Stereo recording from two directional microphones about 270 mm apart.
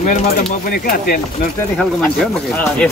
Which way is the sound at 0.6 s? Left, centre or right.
Left.